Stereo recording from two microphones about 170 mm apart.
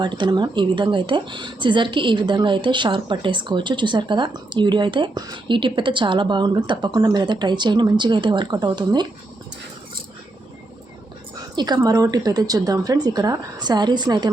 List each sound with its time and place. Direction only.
0.0 s speech: 25° right (ahead or behind)
11.5 s speech: 25° right (ahead or behind)